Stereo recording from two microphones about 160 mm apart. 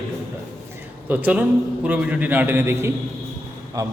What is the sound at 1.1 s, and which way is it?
A man's voice, 10° right (ahead or behind).